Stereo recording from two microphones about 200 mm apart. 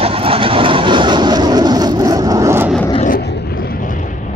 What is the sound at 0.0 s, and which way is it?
Vehicle, 30° right (ahead or behind).